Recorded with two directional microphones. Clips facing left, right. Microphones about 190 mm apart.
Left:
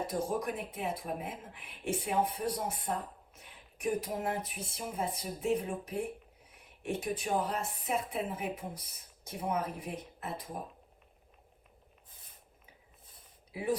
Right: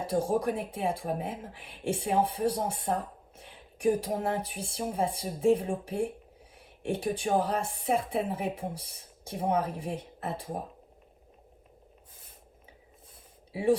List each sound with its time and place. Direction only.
0.0 s speech: 30° right (ahead or behind)
3.3 s a sound: 30° right (ahead or behind)
4.2 s music: 30° right (ahead or behind)
4.9 s speech: 30° right (ahead or behind)
13.5 s speech: 30° right (ahead or behind)